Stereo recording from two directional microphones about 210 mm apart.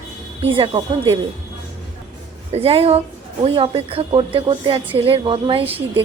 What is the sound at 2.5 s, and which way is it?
A woman's voice, 30° right (ahead or behind).